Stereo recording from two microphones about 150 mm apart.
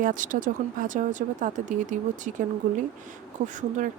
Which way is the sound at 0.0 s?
60° right (ahead or behind).